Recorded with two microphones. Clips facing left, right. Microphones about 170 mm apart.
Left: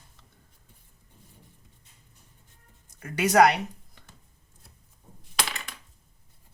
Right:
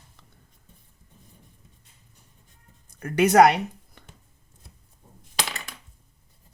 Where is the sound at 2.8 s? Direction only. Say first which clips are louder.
Right 7 dB; 60° right (ahead or behind).